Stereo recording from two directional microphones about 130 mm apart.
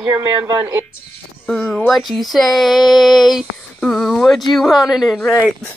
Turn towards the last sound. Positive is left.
turn(degrees=10)  # may be behind; listen again after turning